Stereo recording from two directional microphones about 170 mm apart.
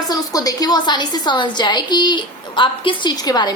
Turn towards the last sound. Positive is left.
turn(degrees=25)  # may be behind; listen again after turning